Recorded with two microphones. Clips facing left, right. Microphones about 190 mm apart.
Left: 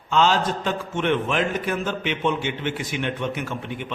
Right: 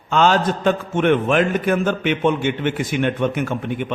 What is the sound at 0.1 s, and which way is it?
A man's voice, 55° right (ahead or behind).